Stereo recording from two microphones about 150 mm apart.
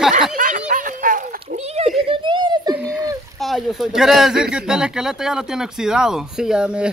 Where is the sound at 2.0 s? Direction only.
35° right (ahead or behind).